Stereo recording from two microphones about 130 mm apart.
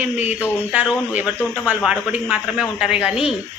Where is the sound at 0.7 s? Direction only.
10° right (ahead or behind).